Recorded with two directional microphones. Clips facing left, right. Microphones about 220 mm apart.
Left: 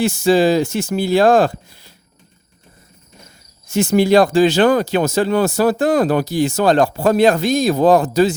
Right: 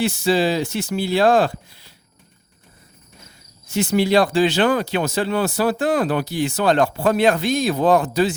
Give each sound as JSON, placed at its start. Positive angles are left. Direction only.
{"t": 0.0, "sound": "speech", "side_deg": 45}
{"t": 3.7, "sound": "speech", "side_deg": 50}